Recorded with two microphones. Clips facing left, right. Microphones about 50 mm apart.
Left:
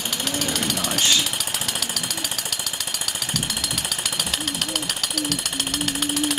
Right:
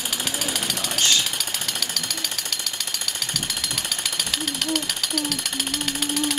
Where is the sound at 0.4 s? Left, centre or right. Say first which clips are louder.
Left 2 dB; centre.